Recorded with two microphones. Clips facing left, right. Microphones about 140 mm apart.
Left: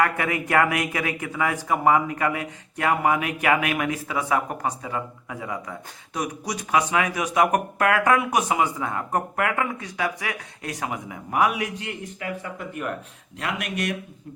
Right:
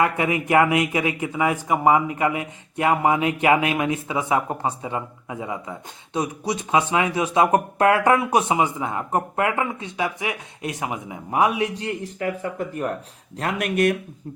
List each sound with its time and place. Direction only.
0.0 s speech: 20° right (ahead or behind); by 13.9 s 50° right (ahead or behind)